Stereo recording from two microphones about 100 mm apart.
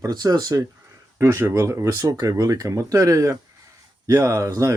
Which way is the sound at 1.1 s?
30° right (ahead or behind).